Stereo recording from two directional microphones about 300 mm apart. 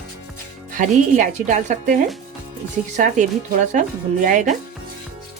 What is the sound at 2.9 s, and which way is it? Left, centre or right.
A woman's voice, right.